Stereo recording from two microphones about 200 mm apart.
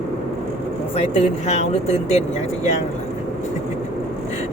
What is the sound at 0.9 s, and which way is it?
Speech, 35° left (ahead or behind).